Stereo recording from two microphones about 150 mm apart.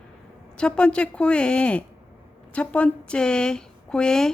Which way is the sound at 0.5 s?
5° left (ahead or behind).